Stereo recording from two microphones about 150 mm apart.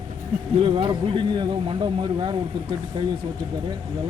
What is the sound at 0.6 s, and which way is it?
Speech, 35° right (ahead or behind).